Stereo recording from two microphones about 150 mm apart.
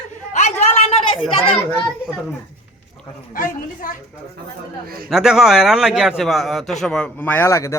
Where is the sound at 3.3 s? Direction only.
65° left (ahead or behind).